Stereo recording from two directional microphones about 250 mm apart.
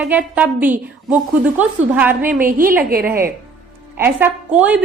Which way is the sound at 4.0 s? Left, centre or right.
Centre.